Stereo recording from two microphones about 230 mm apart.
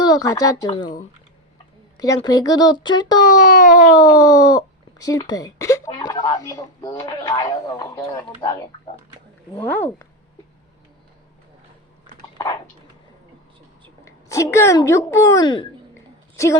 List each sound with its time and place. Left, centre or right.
0.0 s speech: centre
2.0 s speech: centre
3.4 s a sound: left
3.9 s speech: centre
14.0 s a woman's voice: centre